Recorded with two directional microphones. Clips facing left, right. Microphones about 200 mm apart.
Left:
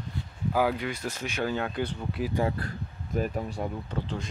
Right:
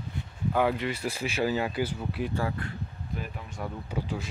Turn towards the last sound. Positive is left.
turn(degrees=-10)  # may be behind; listen again after turning